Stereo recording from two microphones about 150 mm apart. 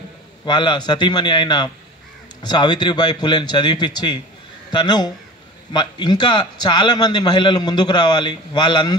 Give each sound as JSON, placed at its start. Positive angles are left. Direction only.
{"t": 0.5, "sound": "a man's voice", "side_deg": 30}